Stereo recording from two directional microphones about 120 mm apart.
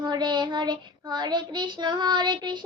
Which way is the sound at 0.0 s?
40° right (ahead or behind).